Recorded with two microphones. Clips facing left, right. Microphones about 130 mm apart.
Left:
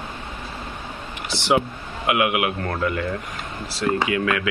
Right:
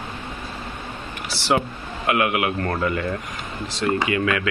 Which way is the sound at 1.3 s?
20° left (ahead or behind).